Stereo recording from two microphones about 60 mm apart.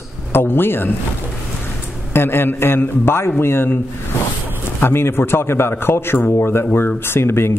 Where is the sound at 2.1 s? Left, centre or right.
Left.